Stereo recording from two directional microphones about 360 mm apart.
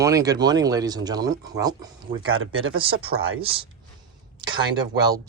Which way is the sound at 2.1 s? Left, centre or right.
Right.